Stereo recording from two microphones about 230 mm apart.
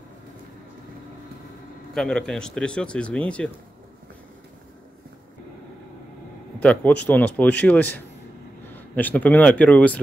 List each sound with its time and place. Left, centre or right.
2.0 s speech: centre
6.6 s a man's voice: centre